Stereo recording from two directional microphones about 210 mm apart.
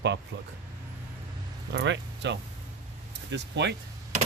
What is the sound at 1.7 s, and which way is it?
Speech, 60° right (ahead or behind).